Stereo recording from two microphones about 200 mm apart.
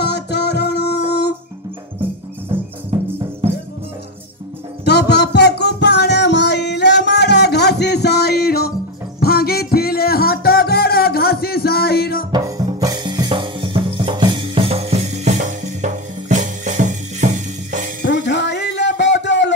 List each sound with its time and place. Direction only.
0.0 s music: 55° left (ahead or behind)
4.8 s music: 55° left (ahead or behind)
12.3 s drum kit: 20° right (ahead or behind); by 17.9 s 40° right (ahead or behind)
18.0 s music: 60° left (ahead or behind)